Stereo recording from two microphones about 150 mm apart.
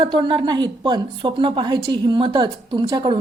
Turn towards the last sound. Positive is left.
turn(degrees=-30)  # may be behind; listen again after turning